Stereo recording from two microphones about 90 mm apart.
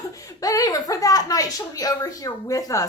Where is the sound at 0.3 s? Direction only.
40° left (ahead or behind).